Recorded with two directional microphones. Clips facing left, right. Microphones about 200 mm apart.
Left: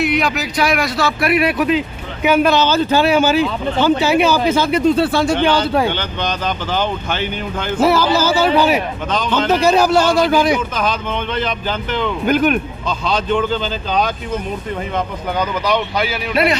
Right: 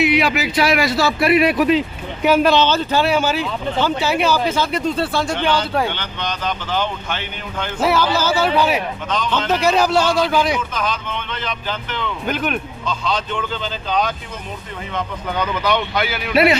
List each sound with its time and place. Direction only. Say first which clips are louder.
0.0 s speech: right 1 dB; 5° right (ahead or behind)
5.9 s speech: left 5 dB; 35° left (ahead or behind)
7.8 s speech: left 3 dB; centre (ahead or behind)
11.3 s speech: left 6 dB; 35° left (ahead or behind)
12.2 s speech: left 8 dB; 5° left (ahead or behind)
13.1 s speech: left 7 dB; 35° left (ahead or behind)
15.6 s speech: even; 35° left (ahead or behind)